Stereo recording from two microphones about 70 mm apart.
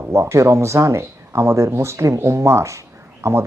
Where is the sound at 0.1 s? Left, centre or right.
Right.